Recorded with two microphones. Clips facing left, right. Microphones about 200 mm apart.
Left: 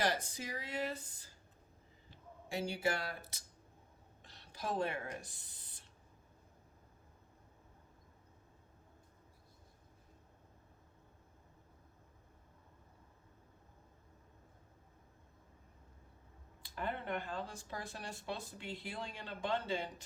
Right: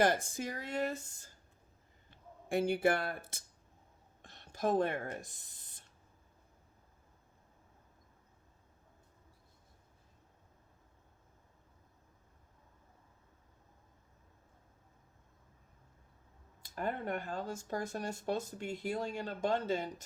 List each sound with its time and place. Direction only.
0.0 s speech: 50° right (ahead or behind)
4.2 s a sound: 50° right (ahead or behind)
16.6 s speech: 45° right (ahead or behind)